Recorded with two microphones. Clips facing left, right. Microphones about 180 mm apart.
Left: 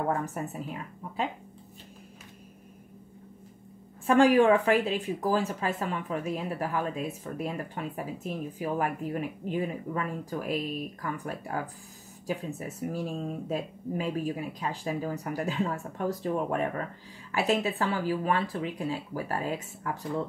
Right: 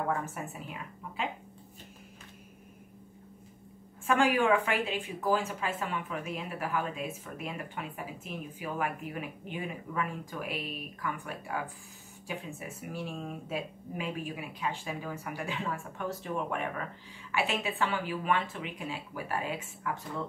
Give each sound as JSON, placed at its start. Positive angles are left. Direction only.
{"t": 0.3, "sound": "speech", "side_deg": 40}
{"t": 4.0, "sound": "speech", "side_deg": 35}